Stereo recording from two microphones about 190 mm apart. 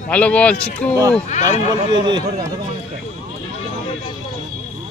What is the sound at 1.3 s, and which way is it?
Speech, 40° left (ahead or behind).